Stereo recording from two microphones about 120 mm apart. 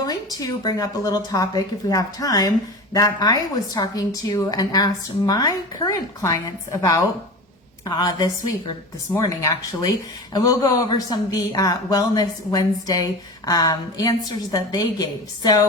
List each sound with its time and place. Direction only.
0.0 s a man's voice: 35° left (ahead or behind)